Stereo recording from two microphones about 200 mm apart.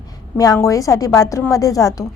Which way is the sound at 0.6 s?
15° left (ahead or behind).